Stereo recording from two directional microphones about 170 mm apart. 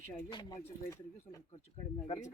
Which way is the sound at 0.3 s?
25° left (ahead or behind).